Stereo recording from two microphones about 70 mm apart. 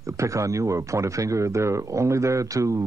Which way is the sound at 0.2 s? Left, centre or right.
Right.